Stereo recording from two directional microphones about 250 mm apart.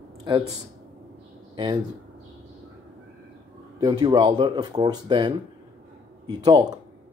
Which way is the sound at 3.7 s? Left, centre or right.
Centre.